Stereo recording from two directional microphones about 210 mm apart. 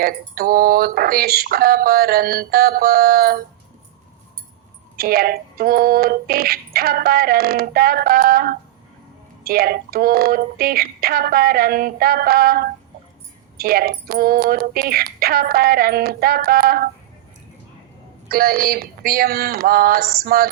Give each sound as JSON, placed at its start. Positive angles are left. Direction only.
{"t": 0.0, "sound": "music", "side_deg": -45}
{"t": 4.9, "sound": "music", "side_deg": -45}
{"t": 18.3, "sound": "music", "side_deg": -45}